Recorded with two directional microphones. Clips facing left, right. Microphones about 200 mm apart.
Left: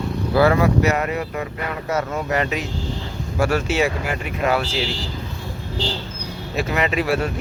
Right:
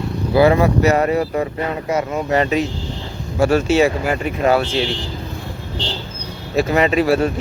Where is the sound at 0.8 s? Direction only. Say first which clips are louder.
Right 6 dB; 35° right (ahead or behind).